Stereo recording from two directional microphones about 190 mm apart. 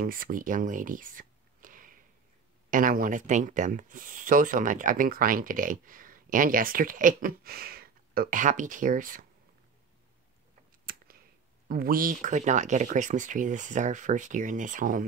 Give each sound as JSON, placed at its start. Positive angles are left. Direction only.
{"t": 0.0, "sound": "speech", "side_deg": -50}
{"t": 10.9, "sound": "a sound", "side_deg": -50}
{"t": 11.7, "sound": "speech", "side_deg": -50}